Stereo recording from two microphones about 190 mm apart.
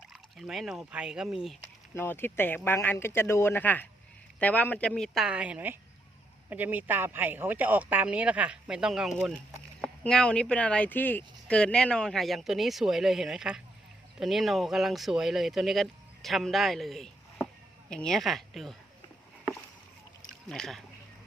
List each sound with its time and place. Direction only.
0.1 s speech: centre (ahead or behind)
2.0 s speech: 10° left (ahead or behind)
20.5 s speech: centre (ahead or behind)